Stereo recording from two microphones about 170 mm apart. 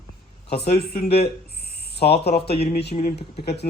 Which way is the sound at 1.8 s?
70° left (ahead or behind).